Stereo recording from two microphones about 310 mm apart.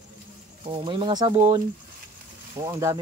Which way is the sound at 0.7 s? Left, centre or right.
Centre.